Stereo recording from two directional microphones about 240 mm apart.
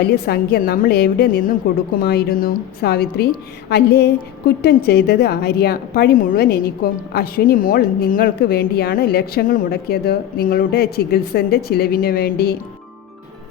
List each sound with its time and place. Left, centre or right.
0.0 s a woman's voice: left